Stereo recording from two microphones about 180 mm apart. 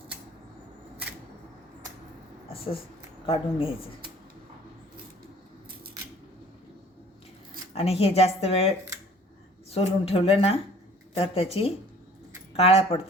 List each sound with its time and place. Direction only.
3.2 s speech: 30° left (ahead or behind)
7.7 s speech: 30° left (ahead or behind)
9.7 s speech: 35° left (ahead or behind)